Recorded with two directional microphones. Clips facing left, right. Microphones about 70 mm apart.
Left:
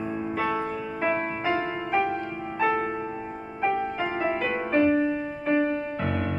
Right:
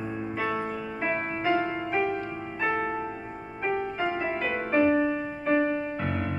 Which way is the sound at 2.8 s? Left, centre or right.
Centre.